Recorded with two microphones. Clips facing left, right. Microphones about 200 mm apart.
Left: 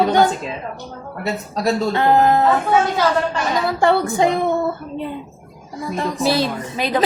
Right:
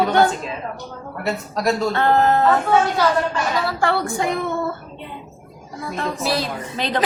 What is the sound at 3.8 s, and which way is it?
Speech, 20° left (ahead or behind).